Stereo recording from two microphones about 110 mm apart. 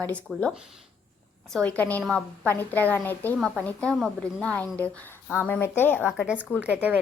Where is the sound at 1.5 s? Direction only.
15° left (ahead or behind).